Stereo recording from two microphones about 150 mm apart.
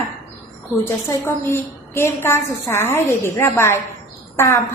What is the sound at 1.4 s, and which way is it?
A woman's voice, 15° left (ahead or behind).